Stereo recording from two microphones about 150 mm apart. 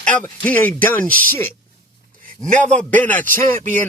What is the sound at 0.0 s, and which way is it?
Speech, 5° left (ahead or behind).